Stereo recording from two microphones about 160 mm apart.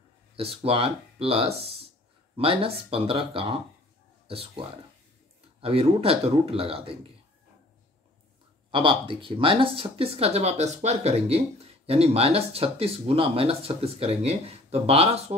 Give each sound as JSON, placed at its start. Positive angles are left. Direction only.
{"t": 0.4, "sound": "speech", "side_deg": -35}
{"t": 8.7, "sound": "speech", "side_deg": -30}